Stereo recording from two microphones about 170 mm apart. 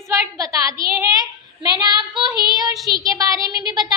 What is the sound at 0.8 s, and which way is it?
Child singing, 20° right (ahead or behind).